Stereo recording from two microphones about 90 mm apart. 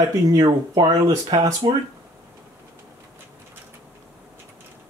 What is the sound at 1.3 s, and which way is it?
Speech, 60° right (ahead or behind).